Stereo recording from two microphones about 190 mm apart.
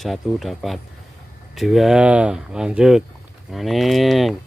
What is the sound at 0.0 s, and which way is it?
Speech, centre (ahead or behind).